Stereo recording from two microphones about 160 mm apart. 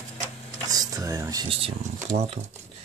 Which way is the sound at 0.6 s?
20° right (ahead or behind).